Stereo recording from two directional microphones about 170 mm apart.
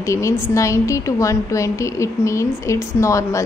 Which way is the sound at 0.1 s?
15° left (ahead or behind).